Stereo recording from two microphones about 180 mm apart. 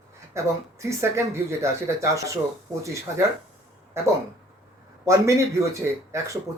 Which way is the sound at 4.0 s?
15° right (ahead or behind).